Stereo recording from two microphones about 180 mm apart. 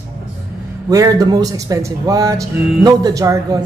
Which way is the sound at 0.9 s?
20° right (ahead or behind).